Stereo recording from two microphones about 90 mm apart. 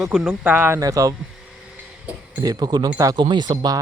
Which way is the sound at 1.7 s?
15° right (ahead or behind).